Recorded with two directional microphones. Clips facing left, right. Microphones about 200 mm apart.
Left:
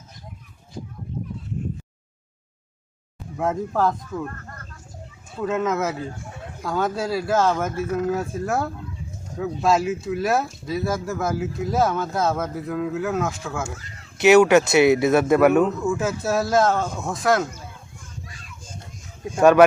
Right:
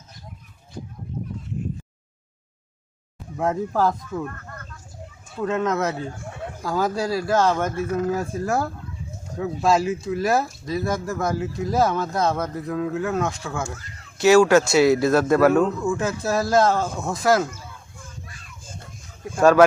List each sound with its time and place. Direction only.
3.3 s speech: centre (ahead or behind)
4.3 s a sound: 35° left (ahead or behind)
5.4 s speech: 5° left (ahead or behind)
14.2 s speech: 20° left (ahead or behind)
14.8 s speech: centre (ahead or behind)
19.4 s speech: 5° left (ahead or behind)